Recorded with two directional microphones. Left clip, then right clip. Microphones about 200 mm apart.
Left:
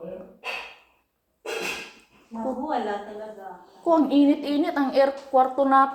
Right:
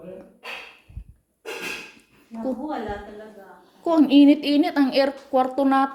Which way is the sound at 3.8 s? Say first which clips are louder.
Right 3 dB; 40° right (ahead or behind).